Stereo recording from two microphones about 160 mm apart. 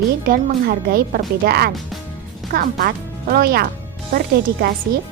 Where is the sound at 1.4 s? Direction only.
80° right.